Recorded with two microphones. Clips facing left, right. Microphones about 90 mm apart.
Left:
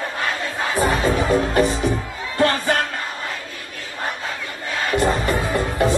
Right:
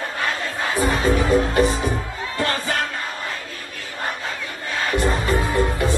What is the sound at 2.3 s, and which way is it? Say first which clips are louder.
Music: left 5 dB; 40° left (ahead or behind).